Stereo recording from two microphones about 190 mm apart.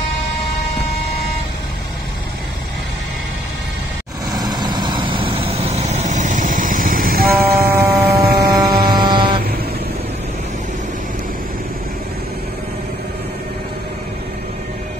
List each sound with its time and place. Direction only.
4.3 s vehicle: 20° right (ahead or behind); by 9.3 s 50° right (ahead or behind)